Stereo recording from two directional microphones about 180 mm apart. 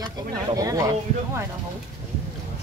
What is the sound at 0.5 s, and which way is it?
Speech, 20° right (ahead or behind).